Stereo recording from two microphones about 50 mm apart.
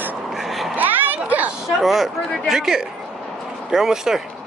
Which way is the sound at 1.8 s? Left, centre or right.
Centre.